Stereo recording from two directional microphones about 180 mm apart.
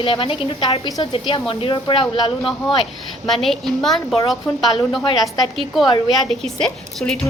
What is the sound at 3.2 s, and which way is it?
Speech, centre (ahead or behind).